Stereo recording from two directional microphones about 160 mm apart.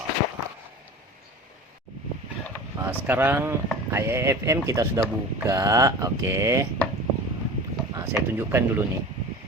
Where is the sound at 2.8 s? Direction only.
10° right (ahead or behind).